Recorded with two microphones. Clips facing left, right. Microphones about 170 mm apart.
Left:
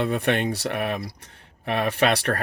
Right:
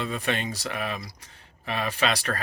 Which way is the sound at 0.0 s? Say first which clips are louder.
Left 6 dB; 60° left (ahead or behind).